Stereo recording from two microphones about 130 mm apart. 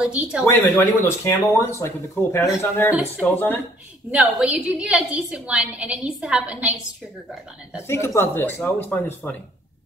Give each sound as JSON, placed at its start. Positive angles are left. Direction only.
{"t": 0.0, "sound": "a woman's voice", "side_deg": -5}
{"t": 0.5, "sound": "speech", "side_deg": 20}
{"t": 4.1, "sound": "a woman's voice", "side_deg": -5}
{"t": 7.7, "sound": "speech", "side_deg": 20}